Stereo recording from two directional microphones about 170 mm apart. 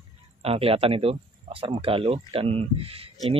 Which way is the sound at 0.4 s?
35° right (ahead or behind).